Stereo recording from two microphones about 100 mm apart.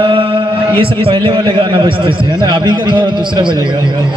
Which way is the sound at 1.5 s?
55° right (ahead or behind).